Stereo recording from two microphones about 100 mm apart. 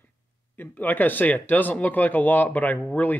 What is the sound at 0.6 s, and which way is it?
Speech, 20° left (ahead or behind).